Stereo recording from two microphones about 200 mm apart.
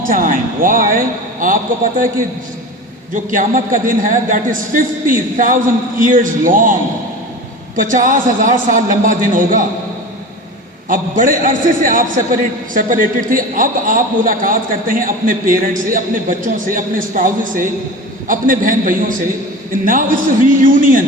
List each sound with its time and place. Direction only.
0.1 s a man's voice: 45° right (ahead or behind)
3.2 s a man's voice: 40° right (ahead or behind)
7.8 s a man's voice: 40° right (ahead or behind)
10.8 s a man's voice: 40° right (ahead or behind)